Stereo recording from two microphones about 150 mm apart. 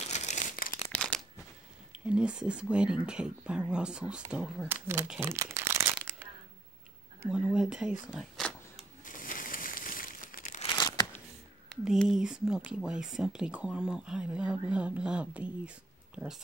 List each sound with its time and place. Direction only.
0.0 s crumpling: 50° left (ahead or behind); by 0.7 s 65° left (ahead or behind)
1.9 s speech: 5° right (ahead or behind)
5.2 s crumpling: 15° right (ahead or behind)
7.2 s speech: 5° right (ahead or behind)
9.0 s crumpling: 65° left (ahead or behind)
11.7 s speech: centre (ahead or behind)